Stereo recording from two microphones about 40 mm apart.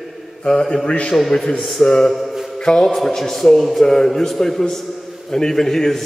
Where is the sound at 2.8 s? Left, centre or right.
Centre.